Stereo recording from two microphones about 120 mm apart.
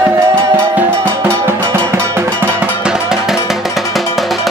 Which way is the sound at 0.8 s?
20° right (ahead or behind).